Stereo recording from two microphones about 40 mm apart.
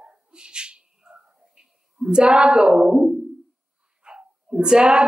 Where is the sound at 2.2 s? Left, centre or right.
Right.